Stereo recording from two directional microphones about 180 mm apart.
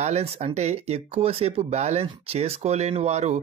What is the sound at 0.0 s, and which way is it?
Speech, 35° right (ahead or behind).